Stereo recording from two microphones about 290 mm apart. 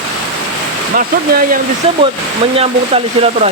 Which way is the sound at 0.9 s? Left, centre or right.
Right.